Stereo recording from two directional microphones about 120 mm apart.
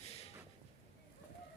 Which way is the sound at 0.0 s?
60° left (ahead or behind).